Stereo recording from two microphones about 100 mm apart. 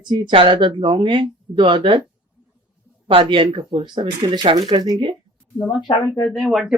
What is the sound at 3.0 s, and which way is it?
Speech, 60° right (ahead or behind).